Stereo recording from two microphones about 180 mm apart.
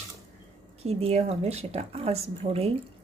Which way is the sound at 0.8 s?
35° right (ahead or behind).